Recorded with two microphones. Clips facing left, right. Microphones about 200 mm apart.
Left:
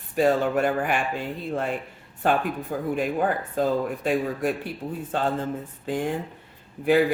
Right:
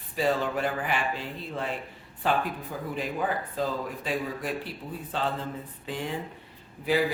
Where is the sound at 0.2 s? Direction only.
50° left (ahead or behind).